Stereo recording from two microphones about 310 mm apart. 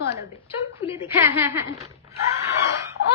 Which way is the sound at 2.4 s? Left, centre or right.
Centre.